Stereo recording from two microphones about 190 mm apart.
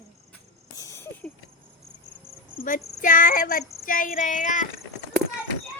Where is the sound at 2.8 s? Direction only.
45° left (ahead or behind).